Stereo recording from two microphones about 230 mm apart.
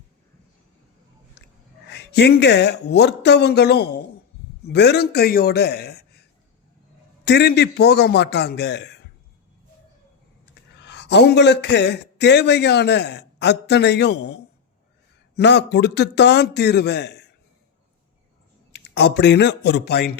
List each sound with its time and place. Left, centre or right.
1.9 s a man's voice: left
7.3 s a man's voice: left
10.5 s a man's voice: left
15.4 s a man's voice: left
18.7 s speech: left